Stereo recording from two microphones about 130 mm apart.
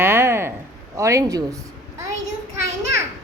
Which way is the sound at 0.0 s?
20° right (ahead or behind).